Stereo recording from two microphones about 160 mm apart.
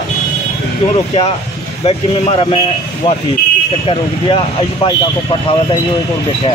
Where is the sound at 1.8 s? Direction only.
35° left (ahead or behind).